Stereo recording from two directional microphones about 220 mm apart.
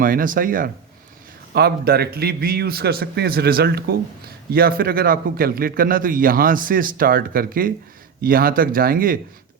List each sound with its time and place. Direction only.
0.0 s a man's voice: 40° right (ahead or behind)